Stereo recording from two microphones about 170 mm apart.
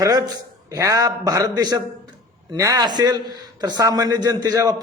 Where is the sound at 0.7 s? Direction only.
20° right (ahead or behind).